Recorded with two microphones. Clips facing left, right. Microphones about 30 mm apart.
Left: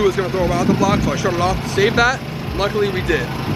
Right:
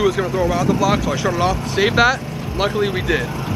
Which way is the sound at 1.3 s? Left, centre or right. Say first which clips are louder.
Left 1 dB; centre.